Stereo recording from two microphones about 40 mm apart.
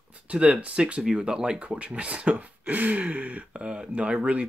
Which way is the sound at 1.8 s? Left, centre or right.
Right.